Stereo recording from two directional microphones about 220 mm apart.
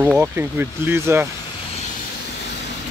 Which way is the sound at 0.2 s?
10° right (ahead or behind).